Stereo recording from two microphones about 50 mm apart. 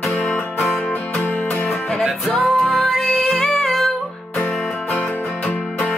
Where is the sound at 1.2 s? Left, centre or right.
Left.